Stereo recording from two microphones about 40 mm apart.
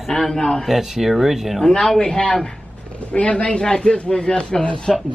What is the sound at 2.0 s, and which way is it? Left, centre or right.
Speech, left.